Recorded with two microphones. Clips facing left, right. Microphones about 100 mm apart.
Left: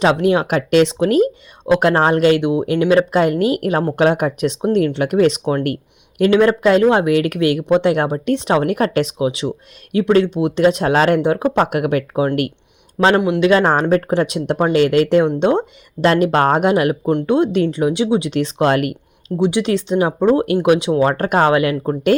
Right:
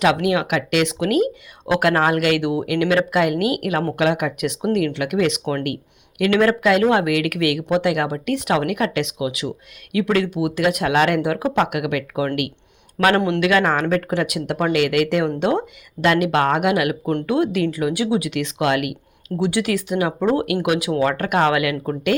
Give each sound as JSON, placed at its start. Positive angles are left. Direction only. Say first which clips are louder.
{"t": 0.0, "sound": "speech", "louder": "left 3 dB", "side_deg": 30}
{"t": 13.1, "sound": "speech", "louder": "left 3 dB", "side_deg": 15}
{"t": 13.4, "sound": "speech", "louder": "left 4 dB", "side_deg": 30}
{"t": 19.4, "sound": "speech", "louder": "left 4 dB", "side_deg": 20}